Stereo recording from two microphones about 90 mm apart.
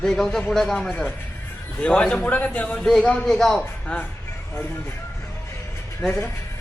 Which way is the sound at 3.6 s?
15° left (ahead or behind).